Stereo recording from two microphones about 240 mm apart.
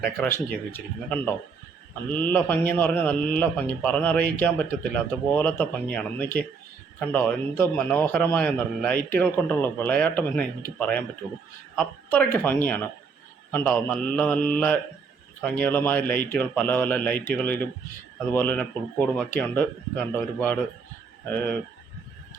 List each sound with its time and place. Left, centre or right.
0.0 s a man's voice: centre
12.0 s a man's voice: centre